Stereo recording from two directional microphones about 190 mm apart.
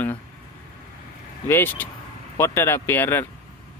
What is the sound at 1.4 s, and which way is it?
Speech, 10° left (ahead or behind).